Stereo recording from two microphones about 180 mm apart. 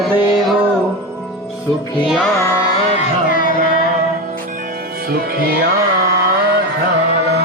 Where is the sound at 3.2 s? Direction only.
50° left (ahead or behind).